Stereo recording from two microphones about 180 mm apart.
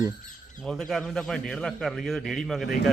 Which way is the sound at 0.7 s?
Centre (ahead or behind).